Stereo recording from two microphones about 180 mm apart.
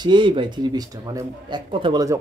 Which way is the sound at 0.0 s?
25° right (ahead or behind).